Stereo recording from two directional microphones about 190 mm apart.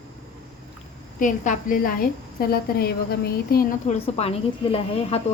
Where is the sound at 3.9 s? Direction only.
35° left (ahead or behind).